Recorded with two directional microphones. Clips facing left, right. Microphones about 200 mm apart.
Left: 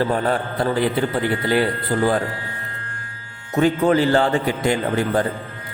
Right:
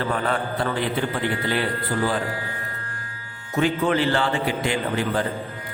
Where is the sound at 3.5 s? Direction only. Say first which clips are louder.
Left 5 dB; 40° left (ahead or behind).